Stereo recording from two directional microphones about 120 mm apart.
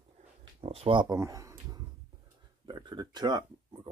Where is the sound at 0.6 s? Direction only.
50° right (ahead or behind).